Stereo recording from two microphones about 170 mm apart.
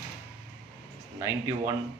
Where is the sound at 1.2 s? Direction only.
15° right (ahead or behind).